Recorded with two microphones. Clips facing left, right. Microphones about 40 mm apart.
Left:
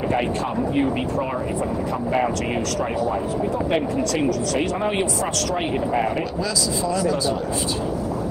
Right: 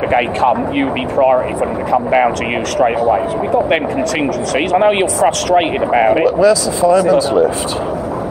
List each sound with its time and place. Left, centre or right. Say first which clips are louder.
0.1 s speech: right 13 dB; right
4.7 s speech: right 11 dB; right